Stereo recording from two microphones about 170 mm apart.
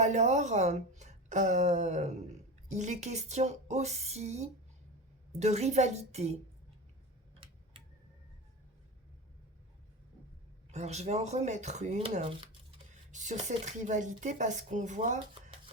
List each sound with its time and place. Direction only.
0.0 s speech: 45° right (ahead or behind)
7.3 s tick-tock: 30° right (ahead or behind)
10.7 s speech: 40° right (ahead or behind)